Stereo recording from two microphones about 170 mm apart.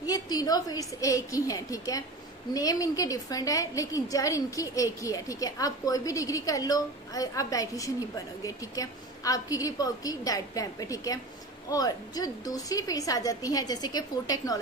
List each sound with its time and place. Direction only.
0.0 s a woman's voice: 20° left (ahead or behind)